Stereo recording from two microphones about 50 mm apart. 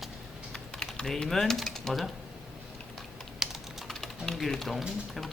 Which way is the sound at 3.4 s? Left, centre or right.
Centre.